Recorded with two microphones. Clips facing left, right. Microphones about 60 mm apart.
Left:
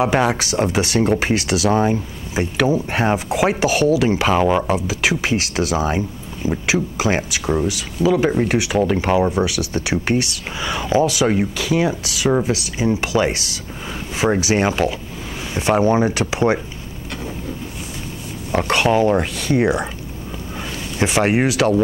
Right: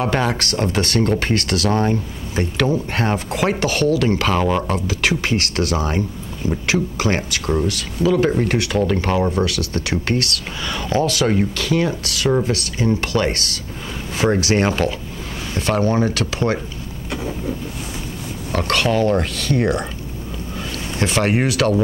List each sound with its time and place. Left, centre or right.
0.0 s speech: centre
18.5 s speech: centre
21.0 s speech: centre